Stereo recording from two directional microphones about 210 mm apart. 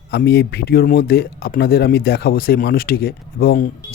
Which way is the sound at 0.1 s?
50° left (ahead or behind).